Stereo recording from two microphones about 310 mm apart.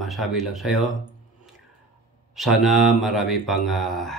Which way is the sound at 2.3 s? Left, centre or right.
Centre.